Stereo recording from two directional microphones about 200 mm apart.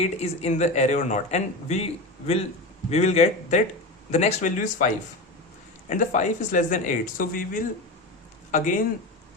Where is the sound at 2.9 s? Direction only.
35° left (ahead or behind).